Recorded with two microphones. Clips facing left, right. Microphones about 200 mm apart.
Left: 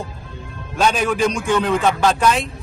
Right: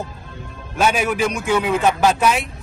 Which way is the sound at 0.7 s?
5° right (ahead or behind).